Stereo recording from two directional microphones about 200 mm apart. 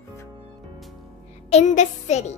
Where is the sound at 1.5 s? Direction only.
35° left (ahead or behind).